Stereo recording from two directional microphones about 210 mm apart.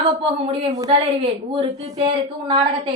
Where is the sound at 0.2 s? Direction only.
20° right (ahead or behind).